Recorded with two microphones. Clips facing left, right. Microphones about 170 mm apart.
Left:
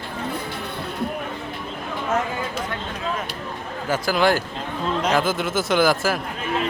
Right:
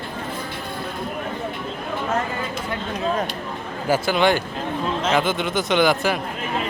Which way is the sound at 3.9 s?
Centre (ahead or behind).